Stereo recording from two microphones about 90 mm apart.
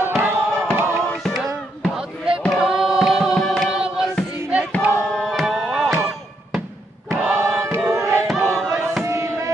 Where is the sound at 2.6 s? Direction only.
5° right (ahead or behind).